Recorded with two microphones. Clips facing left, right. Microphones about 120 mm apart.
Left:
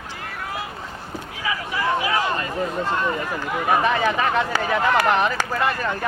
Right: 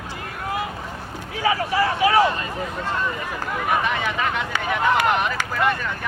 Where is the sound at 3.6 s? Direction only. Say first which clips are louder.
Left 4 dB; 35° left (ahead or behind).